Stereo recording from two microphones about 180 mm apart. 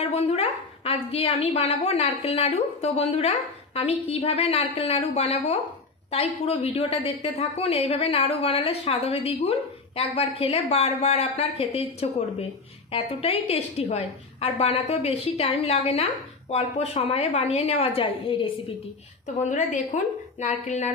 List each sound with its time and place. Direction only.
0.0 s a woman's voice: 35° left (ahead or behind)
19.2 s a woman's voice: 40° left (ahead or behind)